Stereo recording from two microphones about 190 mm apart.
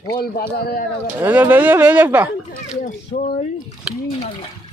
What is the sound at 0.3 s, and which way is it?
Speech, 50° left (ahead or behind).